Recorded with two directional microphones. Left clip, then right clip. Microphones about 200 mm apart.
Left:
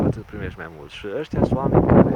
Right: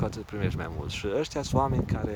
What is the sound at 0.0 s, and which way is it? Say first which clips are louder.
Speech: left 7 dB; 10° right (ahead or behind).